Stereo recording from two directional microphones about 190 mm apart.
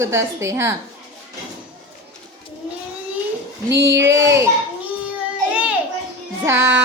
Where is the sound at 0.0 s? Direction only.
15° right (ahead or behind).